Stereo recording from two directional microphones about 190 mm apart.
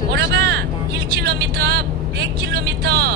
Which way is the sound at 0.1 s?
60° right (ahead or behind).